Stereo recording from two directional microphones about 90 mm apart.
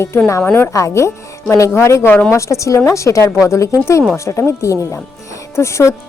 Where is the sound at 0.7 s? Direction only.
35° left (ahead or behind).